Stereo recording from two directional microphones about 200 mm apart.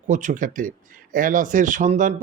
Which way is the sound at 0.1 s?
40° right (ahead or behind).